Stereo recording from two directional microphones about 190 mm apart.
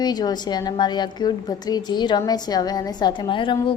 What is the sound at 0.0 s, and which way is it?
A woman's voice, 20° left (ahead or behind).